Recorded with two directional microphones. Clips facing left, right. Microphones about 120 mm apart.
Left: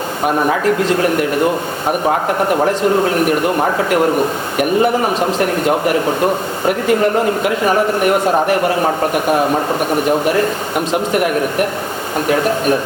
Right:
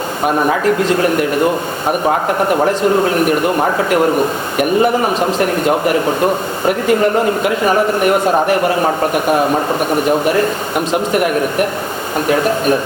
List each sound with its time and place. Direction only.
0.3 s a man's voice: 30° right (ahead or behind)
2.0 s a man's voice: 25° right (ahead or behind)
6.7 s a man's voice: 20° right (ahead or behind)